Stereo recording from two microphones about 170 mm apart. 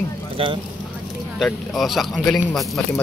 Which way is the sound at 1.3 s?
Centre (ahead or behind).